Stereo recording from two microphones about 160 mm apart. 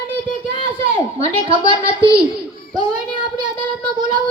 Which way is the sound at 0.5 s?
35° right (ahead or behind).